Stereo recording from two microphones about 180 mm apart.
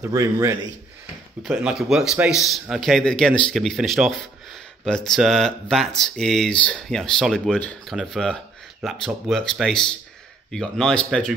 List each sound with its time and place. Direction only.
0.0 s a man's voice: 20° right (ahead or behind)
1.4 s speech: centre (ahead or behind)